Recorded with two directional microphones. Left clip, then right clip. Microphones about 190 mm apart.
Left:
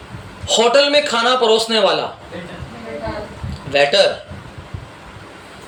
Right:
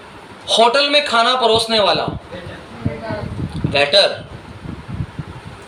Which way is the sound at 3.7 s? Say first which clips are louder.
Even; 15° left (ahead or behind).